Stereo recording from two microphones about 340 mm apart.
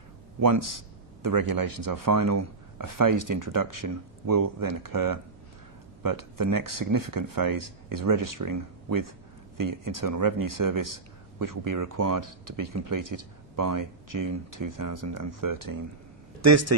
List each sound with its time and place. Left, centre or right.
0.4 s a man's voice: right
16.3 s a man's voice: right